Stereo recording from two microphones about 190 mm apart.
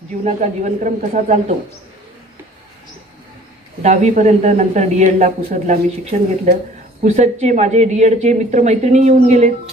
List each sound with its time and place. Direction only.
0.2 s speech: 40° right (ahead or behind)
3.8 s speech: 40° right (ahead or behind)